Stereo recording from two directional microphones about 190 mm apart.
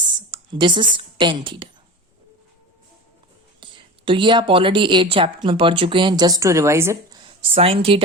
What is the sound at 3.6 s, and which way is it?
Speech, 25° right (ahead or behind).